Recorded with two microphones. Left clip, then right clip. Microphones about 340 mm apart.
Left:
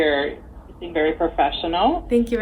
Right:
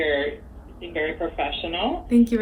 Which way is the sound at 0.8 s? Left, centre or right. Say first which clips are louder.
Left 6 dB; left.